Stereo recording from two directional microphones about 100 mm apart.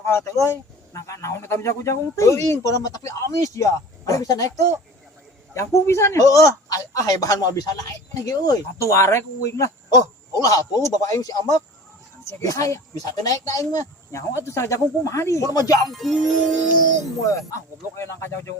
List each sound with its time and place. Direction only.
0.0 s a man's voice: 25° left (ahead or behind)
15.9 s speech: centre (ahead or behind)
17.2 s speech: 30° left (ahead or behind)